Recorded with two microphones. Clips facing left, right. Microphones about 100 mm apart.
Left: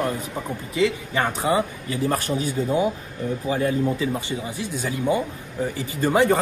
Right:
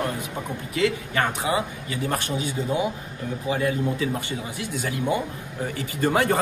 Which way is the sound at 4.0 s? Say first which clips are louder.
Left 2 dB; 20° left (ahead or behind).